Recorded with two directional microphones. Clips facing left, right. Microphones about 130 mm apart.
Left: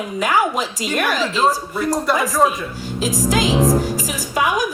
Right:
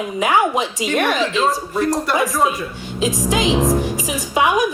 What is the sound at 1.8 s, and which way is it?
Speech, centre (ahead or behind).